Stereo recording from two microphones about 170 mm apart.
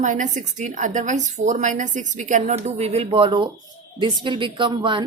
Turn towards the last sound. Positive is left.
turn(degrees=-30)  # may be behind; listen again after turning